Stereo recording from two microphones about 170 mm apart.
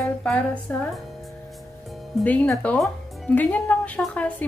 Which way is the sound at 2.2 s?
10° left (ahead or behind).